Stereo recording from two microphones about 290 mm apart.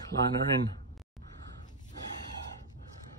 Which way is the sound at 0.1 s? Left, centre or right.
Right.